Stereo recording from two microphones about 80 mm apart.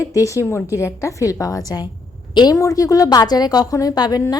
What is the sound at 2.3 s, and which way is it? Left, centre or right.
Speech, left.